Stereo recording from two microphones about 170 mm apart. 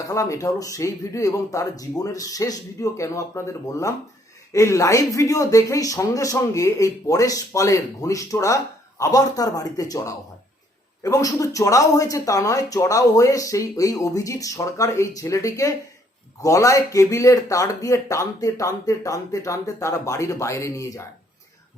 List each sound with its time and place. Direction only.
0.1 s speech: 20° left (ahead or behind)